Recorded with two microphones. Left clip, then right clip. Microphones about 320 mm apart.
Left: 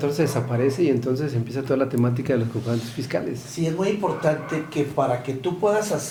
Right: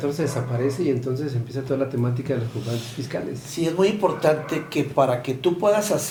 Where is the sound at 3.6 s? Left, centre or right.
Right.